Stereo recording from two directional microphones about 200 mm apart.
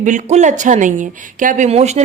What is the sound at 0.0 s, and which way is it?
Speech, 40° right (ahead or behind).